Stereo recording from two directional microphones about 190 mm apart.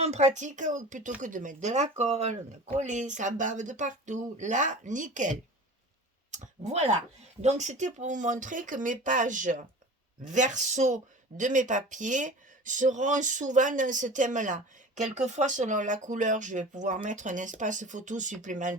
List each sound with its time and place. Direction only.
0.0 s speech: 35° right (ahead or behind)